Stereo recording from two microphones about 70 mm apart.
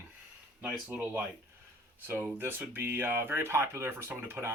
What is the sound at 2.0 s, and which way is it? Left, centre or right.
Speech, right.